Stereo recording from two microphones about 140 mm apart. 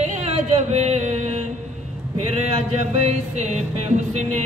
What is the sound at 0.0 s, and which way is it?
Music, 50° right (ahead or behind).